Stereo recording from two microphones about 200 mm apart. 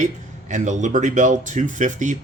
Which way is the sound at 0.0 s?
35° right (ahead or behind).